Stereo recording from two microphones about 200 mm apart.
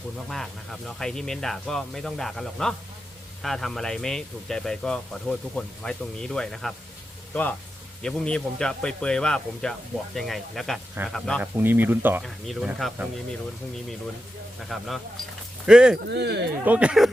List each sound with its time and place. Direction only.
0.3 s speech: centre (ahead or behind)
8.0 s speech: 5° left (ahead or behind)
14.7 s speech: centre (ahead or behind)
16.0 s speech: 55° right (ahead or behind)
16.6 s speech: 5° right (ahead or behind)